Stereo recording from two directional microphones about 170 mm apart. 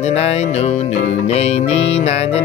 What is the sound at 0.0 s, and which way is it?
Speech, 40° left (ahead or behind).